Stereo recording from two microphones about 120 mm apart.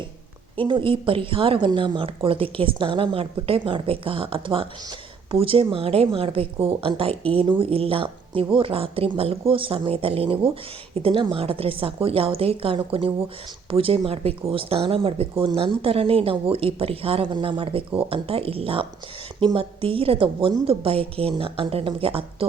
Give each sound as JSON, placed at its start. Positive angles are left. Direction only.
{"t": 0.6, "sound": "a woman's voice", "side_deg": -45}